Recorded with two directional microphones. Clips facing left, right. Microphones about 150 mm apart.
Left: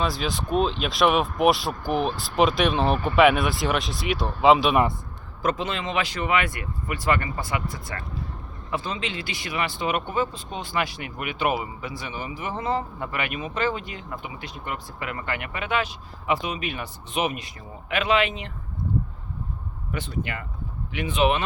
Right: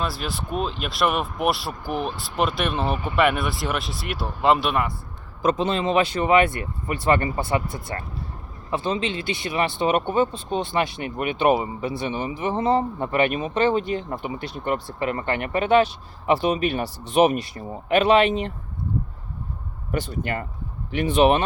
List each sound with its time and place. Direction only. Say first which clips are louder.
0.0 s speech: left 2 dB; 5° right (ahead or behind)
5.4 s speech: right 5 dB; 25° right (ahead or behind)
19.9 s speech: right 4 dB; 40° right (ahead or behind)